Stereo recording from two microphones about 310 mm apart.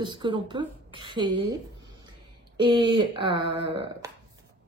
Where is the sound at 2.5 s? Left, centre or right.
Centre.